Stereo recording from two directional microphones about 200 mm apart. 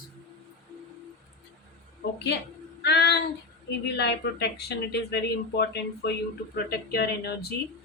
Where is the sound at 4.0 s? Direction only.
55° left (ahead or behind).